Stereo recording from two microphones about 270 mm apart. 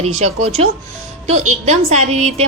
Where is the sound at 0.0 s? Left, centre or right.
Right.